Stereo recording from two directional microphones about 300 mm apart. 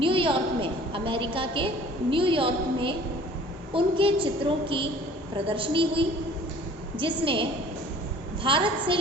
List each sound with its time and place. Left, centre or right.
0.0 s a woman's voice: centre
8.4 s a woman's voice: centre